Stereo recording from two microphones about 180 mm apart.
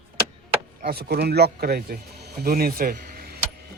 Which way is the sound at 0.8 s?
60° right (ahead or behind).